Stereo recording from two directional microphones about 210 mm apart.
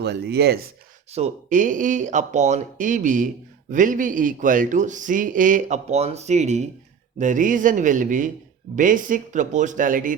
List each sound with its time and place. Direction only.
0.0 s speech: 50° right (ahead or behind)
1.1 s speech: 35° right (ahead or behind)